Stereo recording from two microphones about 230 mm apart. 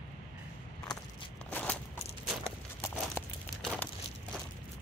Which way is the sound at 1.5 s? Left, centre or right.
Centre.